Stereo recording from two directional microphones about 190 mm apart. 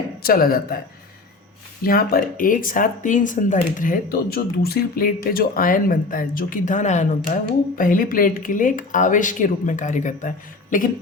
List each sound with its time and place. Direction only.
0.2 s speech: 50° left (ahead or behind)
1.8 s speech: 50° left (ahead or behind)